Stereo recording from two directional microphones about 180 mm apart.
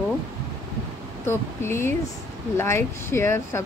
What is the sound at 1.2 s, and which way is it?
Speech, 15° left (ahead or behind).